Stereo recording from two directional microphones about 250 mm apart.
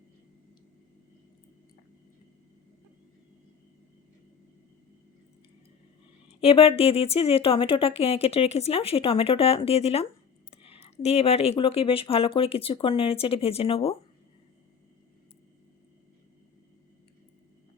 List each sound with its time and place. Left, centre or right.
6.4 s speech: left